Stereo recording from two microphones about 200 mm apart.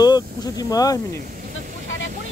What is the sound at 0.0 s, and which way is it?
Speech, 20° left (ahead or behind).